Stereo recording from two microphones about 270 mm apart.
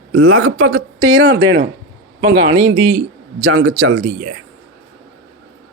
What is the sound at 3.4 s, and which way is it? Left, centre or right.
Speech, right.